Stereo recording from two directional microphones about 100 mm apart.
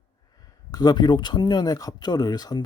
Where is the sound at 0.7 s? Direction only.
40° left (ahead or behind).